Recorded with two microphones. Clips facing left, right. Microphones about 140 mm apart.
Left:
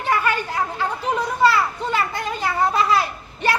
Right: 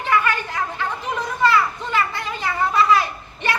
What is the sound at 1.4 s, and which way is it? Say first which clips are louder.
Children playing: right 1 dB; 40° left (ahead or behind).